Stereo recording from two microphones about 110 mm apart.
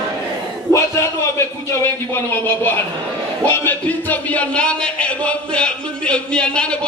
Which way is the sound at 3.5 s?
15° left (ahead or behind).